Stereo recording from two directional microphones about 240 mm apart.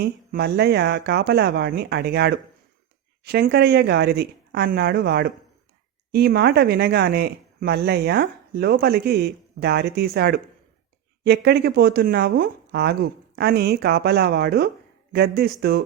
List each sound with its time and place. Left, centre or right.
0.0 s speech: right